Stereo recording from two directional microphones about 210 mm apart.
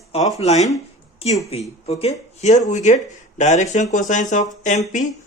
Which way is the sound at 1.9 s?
30° left (ahead or behind).